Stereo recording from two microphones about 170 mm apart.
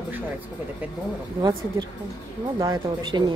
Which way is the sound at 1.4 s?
20° right (ahead or behind).